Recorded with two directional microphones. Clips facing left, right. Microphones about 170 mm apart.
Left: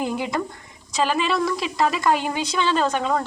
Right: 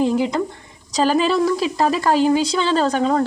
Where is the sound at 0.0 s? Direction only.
25° right (ahead or behind).